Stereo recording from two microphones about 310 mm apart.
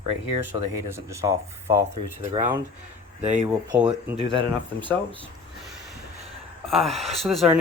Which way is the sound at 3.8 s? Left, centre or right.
Centre.